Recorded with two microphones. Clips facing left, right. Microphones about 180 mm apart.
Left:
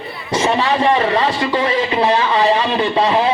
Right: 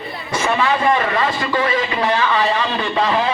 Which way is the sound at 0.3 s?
30° left (ahead or behind).